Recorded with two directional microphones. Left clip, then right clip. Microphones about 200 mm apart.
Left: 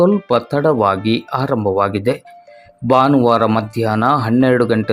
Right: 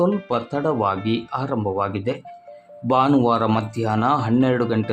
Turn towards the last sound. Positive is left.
turn(degrees=20)  # may be behind; listen again after turning